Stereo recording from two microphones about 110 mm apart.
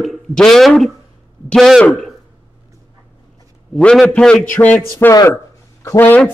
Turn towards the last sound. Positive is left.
turn(degrees=15)  # may be behind; listen again after turning